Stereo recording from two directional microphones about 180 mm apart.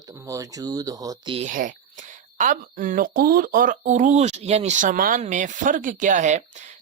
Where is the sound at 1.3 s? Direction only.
45° right (ahead or behind).